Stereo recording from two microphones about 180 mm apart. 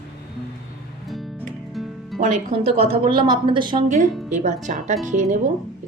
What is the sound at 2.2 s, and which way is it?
A woman's voice, 35° right (ahead or behind).